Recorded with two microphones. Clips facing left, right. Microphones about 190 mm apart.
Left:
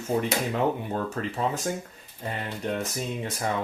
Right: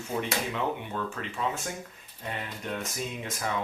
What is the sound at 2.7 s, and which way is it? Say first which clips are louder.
Speech: left 5 dB; 35° left (ahead or behind).